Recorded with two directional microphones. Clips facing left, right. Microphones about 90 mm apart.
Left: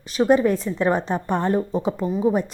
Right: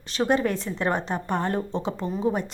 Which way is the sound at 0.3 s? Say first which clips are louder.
Left 6 dB; 15° left (ahead or behind).